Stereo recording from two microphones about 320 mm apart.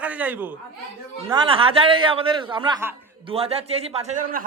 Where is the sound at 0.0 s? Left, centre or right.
Centre.